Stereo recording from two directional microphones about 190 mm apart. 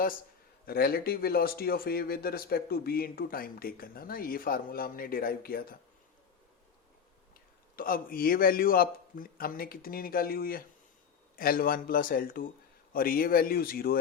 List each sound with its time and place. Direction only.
0.6 s speech: 50° left (ahead or behind)
7.8 s speech: 50° left (ahead or behind)